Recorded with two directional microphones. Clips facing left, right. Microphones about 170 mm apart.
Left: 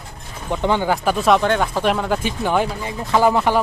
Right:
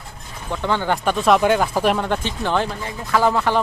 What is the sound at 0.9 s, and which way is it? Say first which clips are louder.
Speech: right 1 dB; 5° left (ahead or behind).